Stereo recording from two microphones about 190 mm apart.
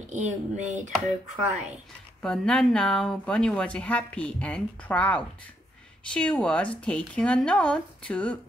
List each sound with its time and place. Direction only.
0.1 s speech: 40° right (ahead or behind)
2.2 s speech: 5° left (ahead or behind)